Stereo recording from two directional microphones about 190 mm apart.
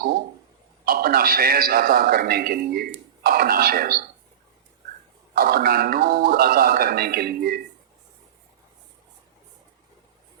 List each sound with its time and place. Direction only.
0.9 s speech: 50° right (ahead or behind)
5.3 s speech: 50° right (ahead or behind)